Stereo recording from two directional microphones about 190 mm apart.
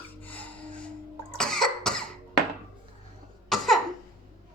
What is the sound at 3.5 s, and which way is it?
Cough, centre (ahead or behind).